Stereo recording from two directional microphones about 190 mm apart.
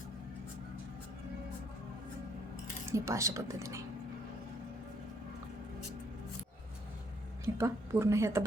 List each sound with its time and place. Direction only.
2.9 s a woman's voice: 15° right (ahead or behind)
7.4 s a woman's voice: 15° right (ahead or behind)